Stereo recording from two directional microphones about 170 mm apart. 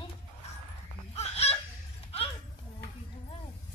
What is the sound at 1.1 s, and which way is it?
Fowl, 40° left (ahead or behind).